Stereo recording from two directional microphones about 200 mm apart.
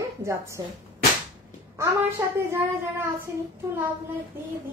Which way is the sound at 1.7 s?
10° right (ahead or behind).